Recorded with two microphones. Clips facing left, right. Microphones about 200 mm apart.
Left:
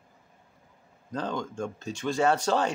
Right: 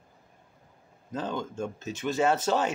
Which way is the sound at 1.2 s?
5° right (ahead or behind).